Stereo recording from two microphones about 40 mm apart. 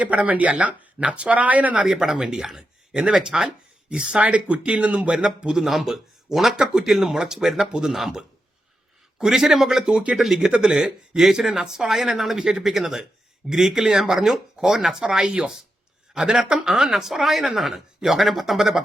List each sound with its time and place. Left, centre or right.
0.0 s speech: right
1.8 s speech: centre; by 5.1 s right
5.1 s speech: centre
5.6 s speech: centre; by 10.2 s right
10.2 s speech: centre
15.2 s speech: right
16.1 s speech: centre